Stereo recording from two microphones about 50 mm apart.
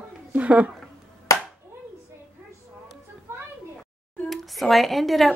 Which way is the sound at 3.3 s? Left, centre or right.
Right.